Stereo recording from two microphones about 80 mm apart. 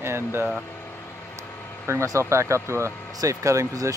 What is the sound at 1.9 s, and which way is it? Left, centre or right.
A man's voice, right.